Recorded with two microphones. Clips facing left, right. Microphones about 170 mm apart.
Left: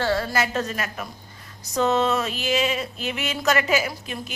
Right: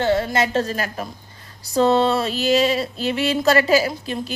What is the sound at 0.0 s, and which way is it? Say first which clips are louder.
A woman's voice: right 4 dB; 20° right (ahead or behind).